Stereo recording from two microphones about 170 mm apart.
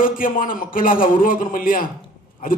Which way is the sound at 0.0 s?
55° left (ahead or behind).